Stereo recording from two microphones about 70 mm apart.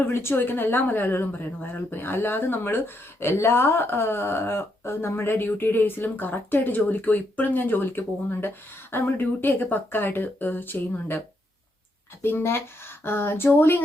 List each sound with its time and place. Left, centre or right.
0.0 s speech: left
12.2 s speech: left